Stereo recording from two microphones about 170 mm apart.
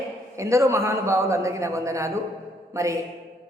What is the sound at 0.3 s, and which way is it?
A man's voice, 15° right (ahead or behind).